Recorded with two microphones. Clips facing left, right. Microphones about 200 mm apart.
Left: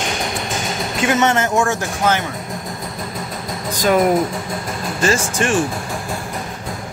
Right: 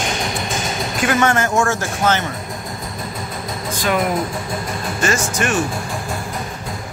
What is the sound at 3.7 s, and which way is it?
Speech, 40° left (ahead or behind).